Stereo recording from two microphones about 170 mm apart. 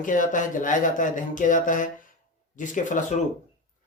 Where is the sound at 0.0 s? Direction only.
50° left (ahead or behind).